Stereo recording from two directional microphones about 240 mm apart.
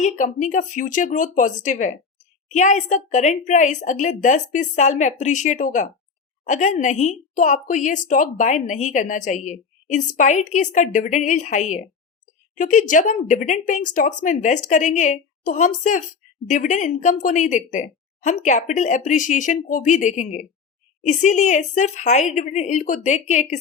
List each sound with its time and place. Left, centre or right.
0.0 s a woman's voice: left